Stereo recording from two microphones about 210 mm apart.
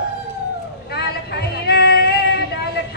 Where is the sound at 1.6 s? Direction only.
50° left (ahead or behind).